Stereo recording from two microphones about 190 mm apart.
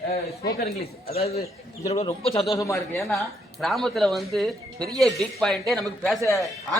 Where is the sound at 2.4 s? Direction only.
20° left (ahead or behind).